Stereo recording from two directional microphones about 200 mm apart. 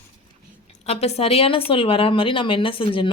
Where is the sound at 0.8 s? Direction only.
30° left (ahead or behind).